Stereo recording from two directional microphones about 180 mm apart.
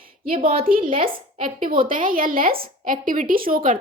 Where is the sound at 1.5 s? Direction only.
50° right (ahead or behind).